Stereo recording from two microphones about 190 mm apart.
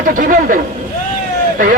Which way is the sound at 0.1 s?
45° right (ahead or behind).